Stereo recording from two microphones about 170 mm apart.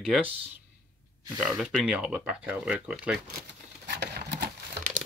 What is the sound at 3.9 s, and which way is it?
Sewing machine, 75° right (ahead or behind).